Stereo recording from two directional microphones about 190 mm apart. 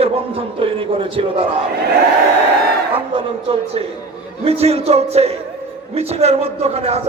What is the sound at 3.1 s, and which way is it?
Speech, 30° right (ahead or behind).